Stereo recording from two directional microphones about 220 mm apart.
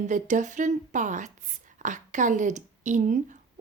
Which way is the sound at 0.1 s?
35° right (ahead or behind).